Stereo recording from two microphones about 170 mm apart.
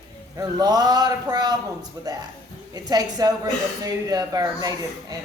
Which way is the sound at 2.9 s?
20° right (ahead or behind).